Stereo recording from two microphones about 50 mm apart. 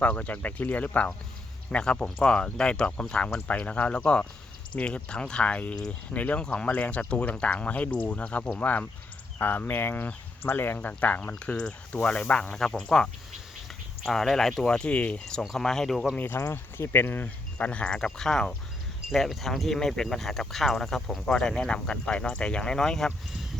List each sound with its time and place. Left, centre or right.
0.0 s speech: left
1.8 s speech: left
6.1 s speech: left
10.8 s speech: left
11.5 s speech: centre
15.5 s speech: centre
16.1 s speech: left
17.2 s speech: left
18.2 s speech: centre
21.7 s speech: centre